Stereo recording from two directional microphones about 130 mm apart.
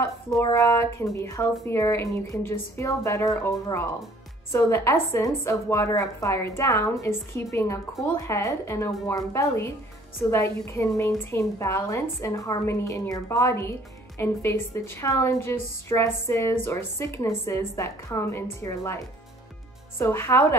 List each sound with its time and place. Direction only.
0.4 s a woman's voice: 25° left (ahead or behind)